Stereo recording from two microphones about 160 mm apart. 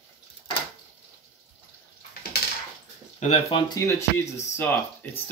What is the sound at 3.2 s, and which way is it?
Speech, 45° left (ahead or behind).